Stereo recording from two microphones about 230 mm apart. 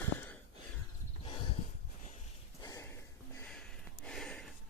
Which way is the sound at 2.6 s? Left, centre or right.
Centre.